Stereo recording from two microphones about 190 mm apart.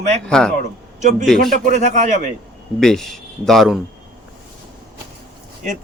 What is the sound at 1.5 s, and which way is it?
Speech, 40° right (ahead or behind).